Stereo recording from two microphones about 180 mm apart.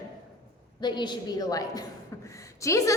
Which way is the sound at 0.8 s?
25° left (ahead or behind).